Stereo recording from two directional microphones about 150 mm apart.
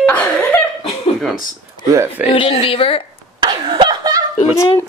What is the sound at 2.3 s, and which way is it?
Speech, 35° left (ahead or behind).